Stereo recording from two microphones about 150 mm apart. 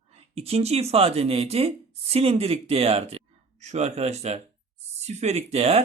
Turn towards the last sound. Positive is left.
turn(degrees=-45)  # may be behind; listen again after turning